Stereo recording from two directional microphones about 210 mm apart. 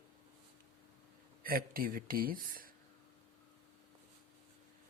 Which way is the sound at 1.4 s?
45° right (ahead or behind).